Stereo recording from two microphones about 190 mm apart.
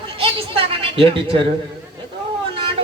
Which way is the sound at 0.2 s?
30° right (ahead or behind).